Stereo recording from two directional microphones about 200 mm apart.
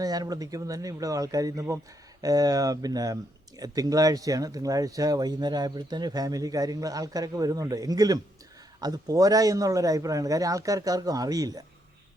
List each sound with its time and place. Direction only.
0.0 s speech: 20° right (ahead or behind)